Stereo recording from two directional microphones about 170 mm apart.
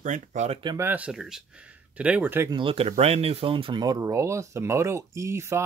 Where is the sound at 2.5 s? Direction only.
30° right (ahead or behind).